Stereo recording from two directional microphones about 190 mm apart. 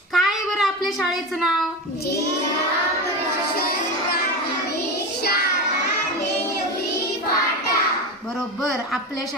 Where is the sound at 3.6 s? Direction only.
55° left (ahead or behind).